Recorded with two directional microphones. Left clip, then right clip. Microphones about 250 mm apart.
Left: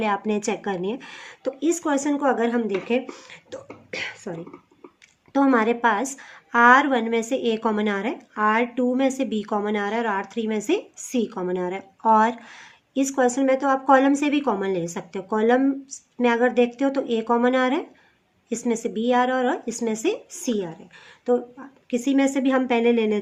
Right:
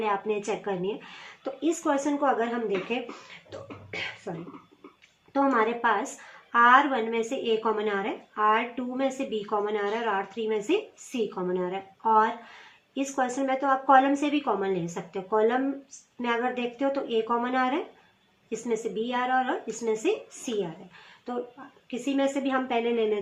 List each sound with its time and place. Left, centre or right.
0.0 s a woman's voice: left
3.5 s beatboxing: left
5.3 s a woman's voice: left
21.8 s a woman's voice: left